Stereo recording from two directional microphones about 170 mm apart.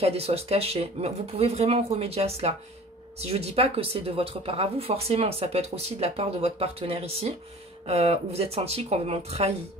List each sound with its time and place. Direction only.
0.0 s speech: 35° right (ahead or behind)